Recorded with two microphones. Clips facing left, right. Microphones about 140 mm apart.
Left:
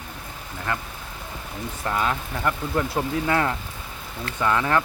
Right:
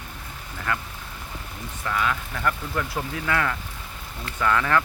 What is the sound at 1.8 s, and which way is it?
Speech, 30° left (ahead or behind).